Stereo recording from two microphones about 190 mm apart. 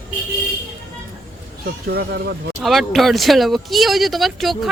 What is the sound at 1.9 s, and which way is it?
Speech, 60° right (ahead or behind).